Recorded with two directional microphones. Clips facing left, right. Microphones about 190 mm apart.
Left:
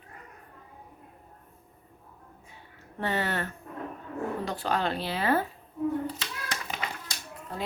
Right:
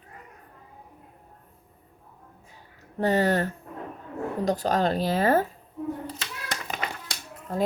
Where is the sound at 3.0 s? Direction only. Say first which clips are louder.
Right 7 dB; 40° right (ahead or behind).